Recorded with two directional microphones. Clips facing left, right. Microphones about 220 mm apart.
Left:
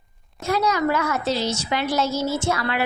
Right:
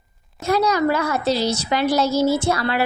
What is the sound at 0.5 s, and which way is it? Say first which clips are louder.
A woman's voice: right 3 dB; 35° right (ahead or behind).